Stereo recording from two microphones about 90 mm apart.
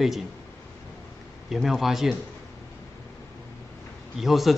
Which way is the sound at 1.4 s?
Centre (ahead or behind).